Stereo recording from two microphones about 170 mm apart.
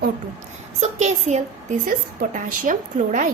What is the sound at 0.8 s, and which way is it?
A woman's voice, 45° right (ahead or behind).